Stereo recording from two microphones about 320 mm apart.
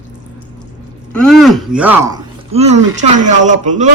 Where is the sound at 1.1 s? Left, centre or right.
Centre.